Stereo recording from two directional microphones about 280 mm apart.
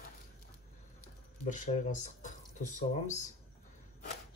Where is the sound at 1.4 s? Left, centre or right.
Left.